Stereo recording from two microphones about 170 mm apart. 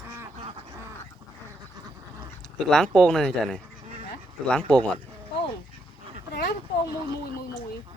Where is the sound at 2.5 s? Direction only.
Centre (ahead or behind).